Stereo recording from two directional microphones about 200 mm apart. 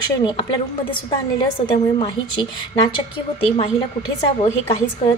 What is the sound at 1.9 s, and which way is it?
A woman's voice, 25° left (ahead or behind).